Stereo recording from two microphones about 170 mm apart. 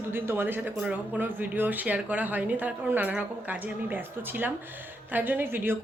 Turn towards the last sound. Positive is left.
turn(degrees=-10)  # may be behind; listen again after turning